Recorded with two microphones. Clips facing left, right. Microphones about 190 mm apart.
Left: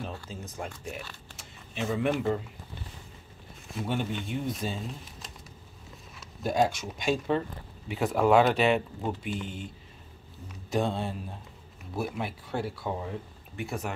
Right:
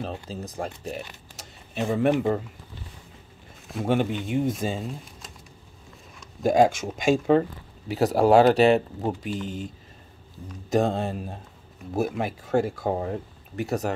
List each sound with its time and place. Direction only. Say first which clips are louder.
0.3 s speech: right 6 dB; 35° right (ahead or behind)
1.3 s zipper: right 9 dB; 40° right (ahead or behind)
2.0 s speech: right 6 dB; 50° right (ahead or behind)
3.9 s speech: right 8 dB; 90° right
4.5 s speech: right 6 dB; 50° right (ahead or behind)
6.4 s speech: right 7 dB; 50° right (ahead or behind)
10.7 s speech: right 6 dB; 45° right (ahead or behind)